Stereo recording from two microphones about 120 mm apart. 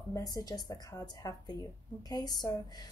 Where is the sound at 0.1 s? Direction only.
30° left (ahead or behind).